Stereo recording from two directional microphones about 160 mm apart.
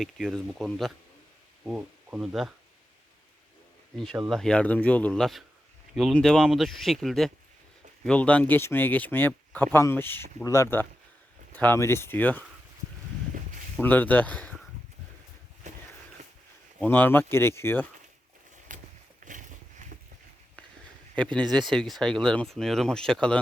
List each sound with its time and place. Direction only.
0.0 s speech: centre (ahead or behind)
3.9 s speech: centre (ahead or behind)
13.7 s speech: 10° left (ahead or behind)
16.8 s speech: 10° left (ahead or behind)
18.7 s a sound: 55° right (ahead or behind)
21.7 s speech: centre (ahead or behind)